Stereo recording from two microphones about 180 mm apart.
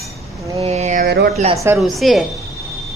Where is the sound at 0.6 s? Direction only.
40° right (ahead or behind).